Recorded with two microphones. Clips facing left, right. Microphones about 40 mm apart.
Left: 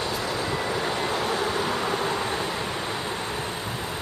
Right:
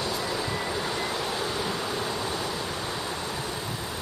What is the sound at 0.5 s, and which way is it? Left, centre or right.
Vehicle, centre.